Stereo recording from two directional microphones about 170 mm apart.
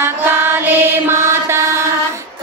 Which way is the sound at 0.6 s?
15° right (ahead or behind).